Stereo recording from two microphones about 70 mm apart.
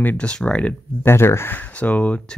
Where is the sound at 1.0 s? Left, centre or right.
Left; by 2.4 s centre.